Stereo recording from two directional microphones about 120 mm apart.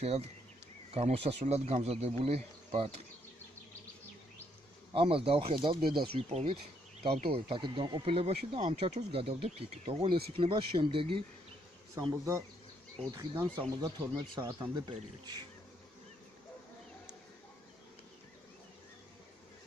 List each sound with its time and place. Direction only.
0.9 s speech: 65° right (ahead or behind)
4.9 s speech: 50° right (ahead or behind)
6.3 s speech: 55° right (ahead or behind)
12.0 s speech: 30° right (ahead or behind)
14.4 s speech: 30° right (ahead or behind)